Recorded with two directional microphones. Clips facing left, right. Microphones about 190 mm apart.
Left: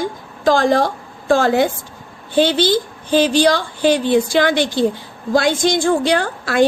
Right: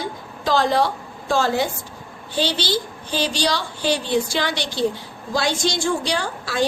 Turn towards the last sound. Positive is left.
turn(degrees=55)  # may be behind; listen again after turning